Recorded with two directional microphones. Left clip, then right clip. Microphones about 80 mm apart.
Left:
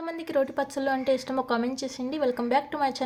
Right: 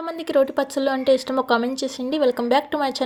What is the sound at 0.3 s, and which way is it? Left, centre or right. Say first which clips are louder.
A woman's voice: right 7 dB; right.